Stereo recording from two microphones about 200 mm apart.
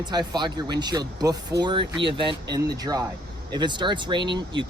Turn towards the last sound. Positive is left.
turn(degrees=-25)  # may be behind; listen again after turning